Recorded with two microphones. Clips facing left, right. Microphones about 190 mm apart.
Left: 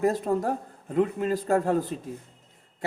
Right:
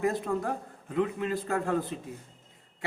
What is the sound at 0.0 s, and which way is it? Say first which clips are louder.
A man's voice: left 4 dB; 40° left (ahead or behind).